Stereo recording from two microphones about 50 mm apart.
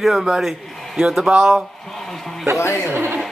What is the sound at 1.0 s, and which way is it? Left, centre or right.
Speech, centre.